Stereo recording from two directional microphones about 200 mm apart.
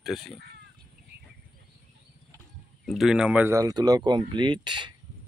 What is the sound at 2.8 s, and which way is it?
Speech, centre (ahead or behind).